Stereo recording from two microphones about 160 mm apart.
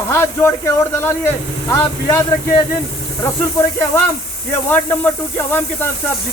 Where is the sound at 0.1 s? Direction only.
15° left (ahead or behind).